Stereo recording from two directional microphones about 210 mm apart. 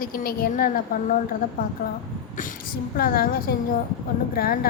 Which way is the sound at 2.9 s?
45° left (ahead or behind).